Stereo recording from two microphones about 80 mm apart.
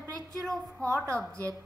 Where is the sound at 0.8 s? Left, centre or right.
Right.